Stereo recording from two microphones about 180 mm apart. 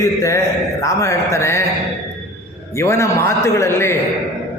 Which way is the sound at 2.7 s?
15° left (ahead or behind).